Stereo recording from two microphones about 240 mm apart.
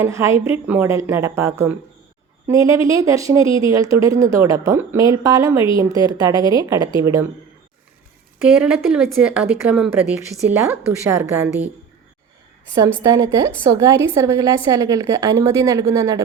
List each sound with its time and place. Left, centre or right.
0.0 s a woman's voice: centre
8.4 s speech: centre
13.0 s a woman's voice: centre